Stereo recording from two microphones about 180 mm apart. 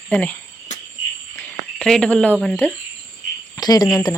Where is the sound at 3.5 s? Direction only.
20° left (ahead or behind).